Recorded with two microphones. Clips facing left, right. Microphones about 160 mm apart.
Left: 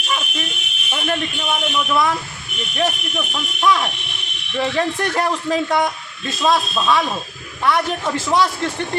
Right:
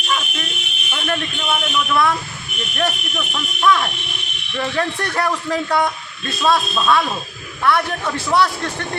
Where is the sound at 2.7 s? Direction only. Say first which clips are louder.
Left 1 dB; 10° left (ahead or behind).